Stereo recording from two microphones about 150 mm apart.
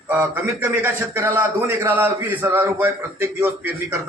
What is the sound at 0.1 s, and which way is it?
A man's voice, 15° right (ahead or behind).